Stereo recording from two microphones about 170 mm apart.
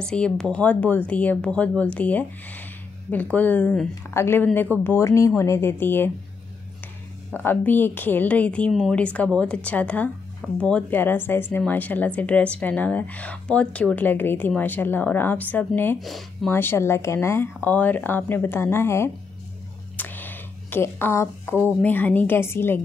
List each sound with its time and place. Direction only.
0.0 s a woman's voice: 5° left (ahead or behind)
7.2 s a woman's voice: 10° left (ahead or behind)
16.0 s speech: centre (ahead or behind)
16.4 s a woman's voice: 15° left (ahead or behind)
20.0 s a sound: 10° left (ahead or behind)
21.8 s a woman's voice: 10° left (ahead or behind)